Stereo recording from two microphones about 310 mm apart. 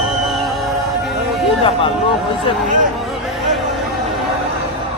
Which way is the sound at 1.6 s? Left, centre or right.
Centre.